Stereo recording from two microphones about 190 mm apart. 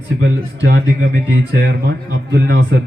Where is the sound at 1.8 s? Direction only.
60° right (ahead or behind).